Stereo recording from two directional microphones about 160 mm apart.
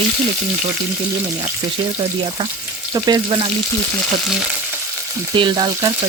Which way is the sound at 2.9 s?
25° right (ahead or behind).